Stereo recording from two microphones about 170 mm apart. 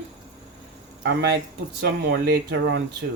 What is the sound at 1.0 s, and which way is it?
Speech, 75° right (ahead or behind).